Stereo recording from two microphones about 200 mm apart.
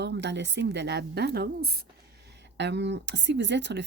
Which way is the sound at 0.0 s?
60° right (ahead or behind).